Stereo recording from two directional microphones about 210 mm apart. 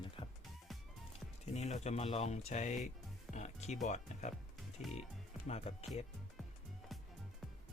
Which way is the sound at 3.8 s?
35° left (ahead or behind).